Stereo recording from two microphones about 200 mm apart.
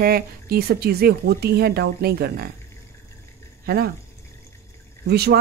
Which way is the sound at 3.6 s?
50° right (ahead or behind).